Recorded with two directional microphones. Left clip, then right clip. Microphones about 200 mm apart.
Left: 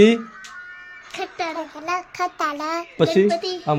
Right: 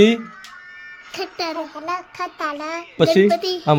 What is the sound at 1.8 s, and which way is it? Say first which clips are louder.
A child's voice: left 5 dB; 5° left (ahead or behind).